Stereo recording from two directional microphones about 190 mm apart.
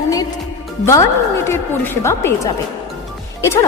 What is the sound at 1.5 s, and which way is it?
Speech, 10° left (ahead or behind).